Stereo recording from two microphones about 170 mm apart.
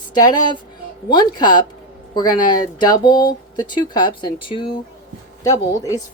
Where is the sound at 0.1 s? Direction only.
25° left (ahead or behind).